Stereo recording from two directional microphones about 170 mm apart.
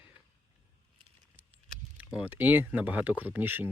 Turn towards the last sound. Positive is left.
turn(degrees=-10)  # may be behind; listen again after turning